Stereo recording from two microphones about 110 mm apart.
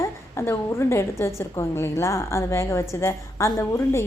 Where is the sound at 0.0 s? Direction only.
25° left (ahead or behind).